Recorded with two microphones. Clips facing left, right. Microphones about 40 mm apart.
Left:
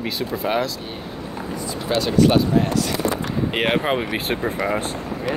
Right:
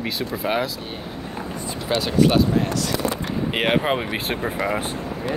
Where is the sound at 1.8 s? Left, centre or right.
Centre.